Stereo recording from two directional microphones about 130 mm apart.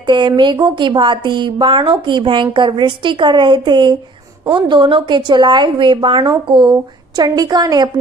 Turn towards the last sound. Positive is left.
turn(degrees=-35)  # may be behind; listen again after turning